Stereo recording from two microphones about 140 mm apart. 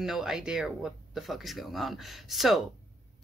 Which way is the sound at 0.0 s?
Centre (ahead or behind).